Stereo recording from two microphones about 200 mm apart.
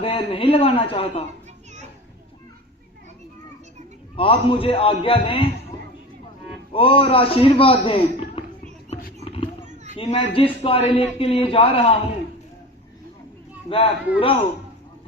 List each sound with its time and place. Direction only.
0.0 s a man's voice: 25° left (ahead or behind)
4.2 s a man's voice: 25° left (ahead or behind)
6.7 s a man's voice: 25° left (ahead or behind)
9.2 s a sound: 25° left (ahead or behind)
10.0 s a man's voice: 30° left (ahead or behind)
13.7 s a man's voice: 25° left (ahead or behind)